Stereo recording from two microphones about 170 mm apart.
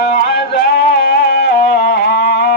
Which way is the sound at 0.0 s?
65° left (ahead or behind).